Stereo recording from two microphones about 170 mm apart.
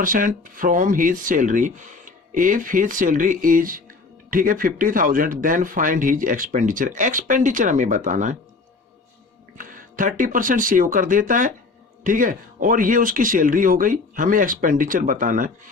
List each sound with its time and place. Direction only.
0.0 s speech: 55° right (ahead or behind)
9.6 s speech: 55° right (ahead or behind)